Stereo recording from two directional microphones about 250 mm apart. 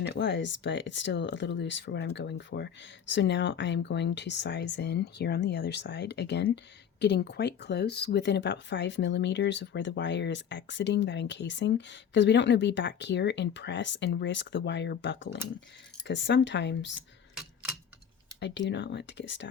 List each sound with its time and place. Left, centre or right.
0.0 s speech: left
17.3 s typewriter: centre
18.3 s speech: left